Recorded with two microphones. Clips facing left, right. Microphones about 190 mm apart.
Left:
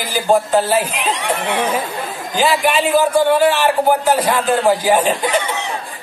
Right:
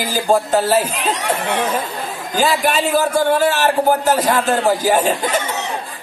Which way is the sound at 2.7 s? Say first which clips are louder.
Left 2 dB; 45° right (ahead or behind).